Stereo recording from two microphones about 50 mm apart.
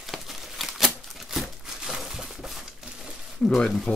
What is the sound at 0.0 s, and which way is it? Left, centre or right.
Crumpling, centre.